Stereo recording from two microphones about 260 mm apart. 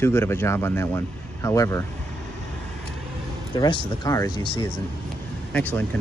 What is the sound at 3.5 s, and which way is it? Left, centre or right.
Speech, centre.